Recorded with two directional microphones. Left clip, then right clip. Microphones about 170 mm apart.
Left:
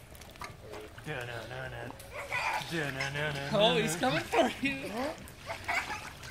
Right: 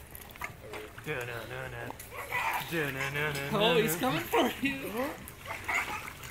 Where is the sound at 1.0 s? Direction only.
30° left (ahead or behind).